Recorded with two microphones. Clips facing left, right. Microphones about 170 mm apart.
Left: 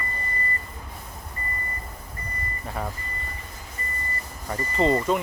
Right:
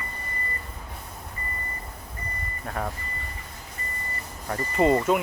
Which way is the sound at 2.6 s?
5° left (ahead or behind).